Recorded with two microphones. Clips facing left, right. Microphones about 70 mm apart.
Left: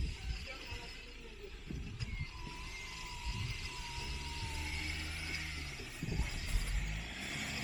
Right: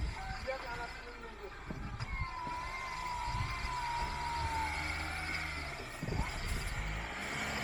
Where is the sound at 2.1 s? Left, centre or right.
Right.